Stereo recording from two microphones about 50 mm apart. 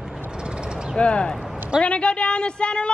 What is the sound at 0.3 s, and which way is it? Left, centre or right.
Vehicle, centre.